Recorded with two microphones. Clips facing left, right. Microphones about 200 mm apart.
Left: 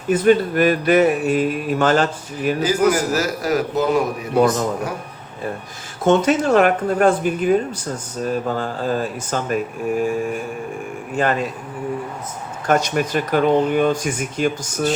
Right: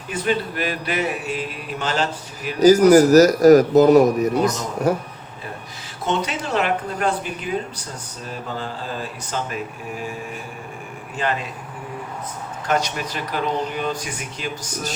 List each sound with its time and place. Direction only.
0.1 s speech: 50° left (ahead or behind)
2.6 s a man's voice: 40° right (ahead or behind)
6.1 s speech: 45° left (ahead or behind)
12.6 s speech: 50° left (ahead or behind)